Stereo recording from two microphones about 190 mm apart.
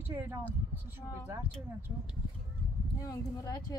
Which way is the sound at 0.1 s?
15° right (ahead or behind).